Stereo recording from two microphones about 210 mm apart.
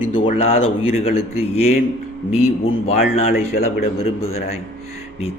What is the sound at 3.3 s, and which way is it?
Speech, 45° left (ahead or behind).